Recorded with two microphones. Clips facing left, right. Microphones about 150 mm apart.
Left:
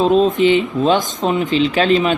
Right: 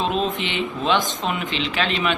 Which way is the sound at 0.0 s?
40° left (ahead or behind).